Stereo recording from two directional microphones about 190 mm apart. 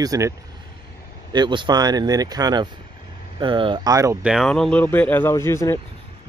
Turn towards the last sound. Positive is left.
turn(degrees=15)  # may be behind; listen again after turning